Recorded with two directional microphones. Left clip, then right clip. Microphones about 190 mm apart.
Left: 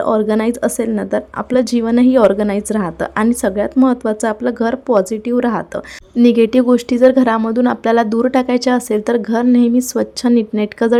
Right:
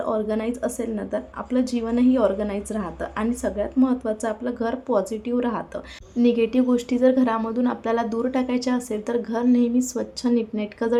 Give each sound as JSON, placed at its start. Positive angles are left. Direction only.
{"t": 0.0, "sound": "a woman's voice", "side_deg": 55}